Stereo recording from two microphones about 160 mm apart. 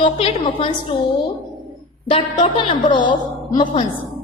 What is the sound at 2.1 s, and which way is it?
Speech, 30° left (ahead or behind).